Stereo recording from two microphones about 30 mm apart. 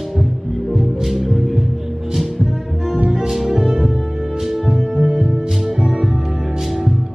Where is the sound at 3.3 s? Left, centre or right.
Centre.